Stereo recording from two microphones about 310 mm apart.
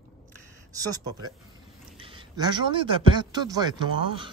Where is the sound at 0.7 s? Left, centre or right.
Centre.